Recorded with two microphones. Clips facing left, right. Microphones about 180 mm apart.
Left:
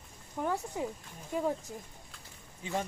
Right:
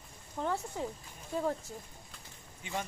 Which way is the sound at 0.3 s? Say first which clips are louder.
Left 1 dB; 10° left (ahead or behind).